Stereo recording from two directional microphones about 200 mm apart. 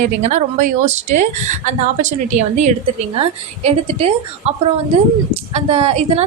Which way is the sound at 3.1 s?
30° right (ahead or behind).